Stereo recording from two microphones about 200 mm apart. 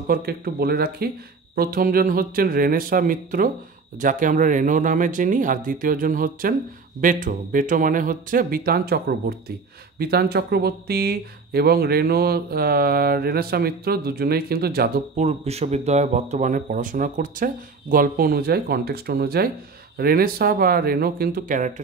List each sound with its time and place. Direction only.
0.1 s speech: 50° right (ahead or behind)
15.2 s speech: 30° right (ahead or behind)